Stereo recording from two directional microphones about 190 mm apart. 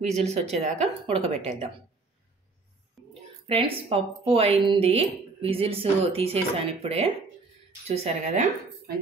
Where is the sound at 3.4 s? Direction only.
30° right (ahead or behind).